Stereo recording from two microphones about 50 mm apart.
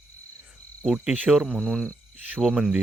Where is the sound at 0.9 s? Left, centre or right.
Centre.